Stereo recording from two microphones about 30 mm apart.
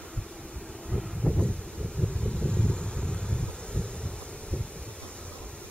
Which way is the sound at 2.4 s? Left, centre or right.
Left.